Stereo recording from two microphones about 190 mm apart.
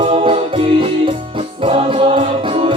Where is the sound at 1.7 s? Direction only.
30° right (ahead or behind).